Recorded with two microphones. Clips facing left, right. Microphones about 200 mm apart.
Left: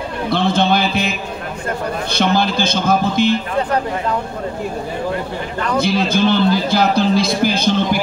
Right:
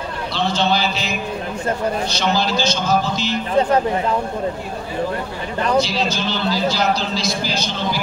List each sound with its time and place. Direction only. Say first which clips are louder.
0.3 s a sound: left 4 dB; 55° left (ahead or behind)
2.1 s speech: left 3 dB; 55° left (ahead or behind)
5.8 s speech: left 8 dB; 55° left (ahead or behind)